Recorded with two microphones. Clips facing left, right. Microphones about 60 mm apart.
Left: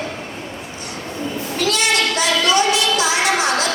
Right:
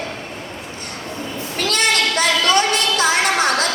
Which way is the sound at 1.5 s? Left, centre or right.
Right.